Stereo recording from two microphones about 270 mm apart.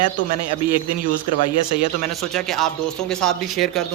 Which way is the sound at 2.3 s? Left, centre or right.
Centre.